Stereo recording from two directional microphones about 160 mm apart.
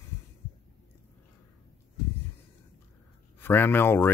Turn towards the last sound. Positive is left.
turn(degrees=15)  # may be behind; listen again after turning